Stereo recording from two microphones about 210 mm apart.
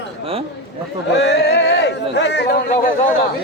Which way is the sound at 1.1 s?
55° left (ahead or behind).